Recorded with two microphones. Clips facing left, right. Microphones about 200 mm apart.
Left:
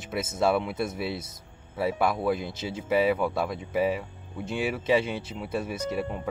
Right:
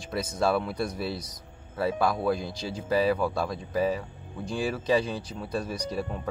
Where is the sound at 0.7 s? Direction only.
5° left (ahead or behind).